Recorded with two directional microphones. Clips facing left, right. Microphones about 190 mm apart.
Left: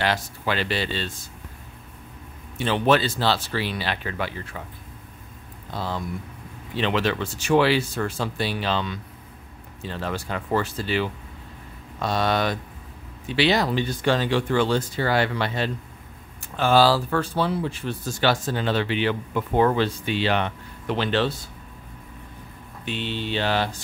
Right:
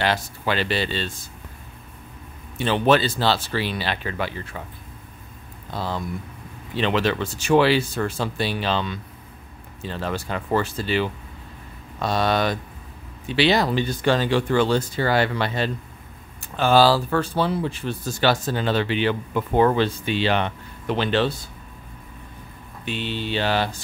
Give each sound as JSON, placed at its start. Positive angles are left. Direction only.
{"t": 0.0, "sound": "speech", "side_deg": -30}
{"t": 2.6, "sound": "speech", "side_deg": -30}
{"t": 5.8, "sound": "speech", "side_deg": -35}
{"t": 22.8, "sound": "speech", "side_deg": -5}